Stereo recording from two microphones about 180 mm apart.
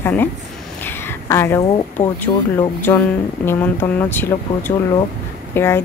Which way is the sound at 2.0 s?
40° left (ahead or behind).